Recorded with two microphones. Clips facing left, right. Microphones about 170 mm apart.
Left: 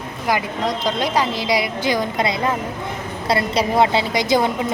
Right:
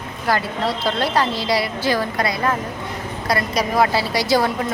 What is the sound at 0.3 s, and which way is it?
A woman's voice, 15° left (ahead or behind).